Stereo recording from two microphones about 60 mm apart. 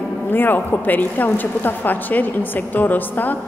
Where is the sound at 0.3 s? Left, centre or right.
Left.